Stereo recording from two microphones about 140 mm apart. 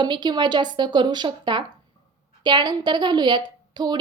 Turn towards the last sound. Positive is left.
turn(degrees=-30)  # may be behind; listen again after turning